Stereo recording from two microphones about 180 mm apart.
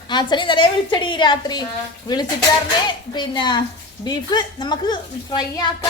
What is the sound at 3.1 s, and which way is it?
A woman's voice, 25° left (ahead or behind).